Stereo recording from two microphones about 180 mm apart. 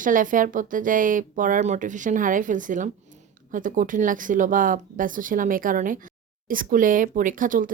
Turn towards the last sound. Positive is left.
turn(degrees=-50)  # may be behind; listen again after turning